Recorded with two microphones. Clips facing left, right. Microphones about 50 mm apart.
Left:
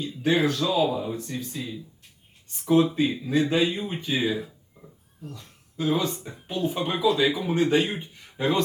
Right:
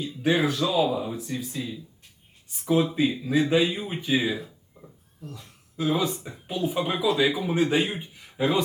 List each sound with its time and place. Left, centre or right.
0.0 s speech: centre
4.4 s a sound: centre
5.3 s speech: centre